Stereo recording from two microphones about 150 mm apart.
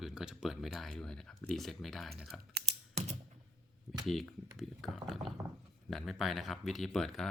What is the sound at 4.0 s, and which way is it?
Speech, centre (ahead or behind).